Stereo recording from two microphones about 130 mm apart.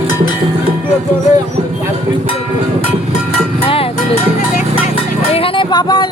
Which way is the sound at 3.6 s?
45° left (ahead or behind).